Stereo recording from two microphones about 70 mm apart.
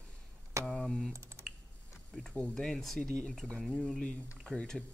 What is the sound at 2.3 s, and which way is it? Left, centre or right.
Speech, centre.